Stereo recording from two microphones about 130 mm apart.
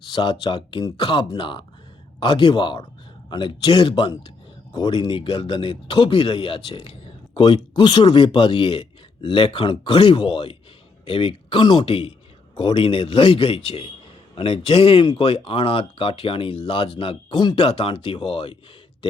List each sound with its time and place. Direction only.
0.1 s speech: 40° left (ahead or behind)